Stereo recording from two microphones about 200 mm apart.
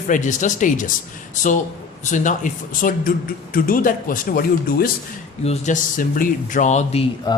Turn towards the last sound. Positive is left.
turn(degrees=20)  # may be behind; listen again after turning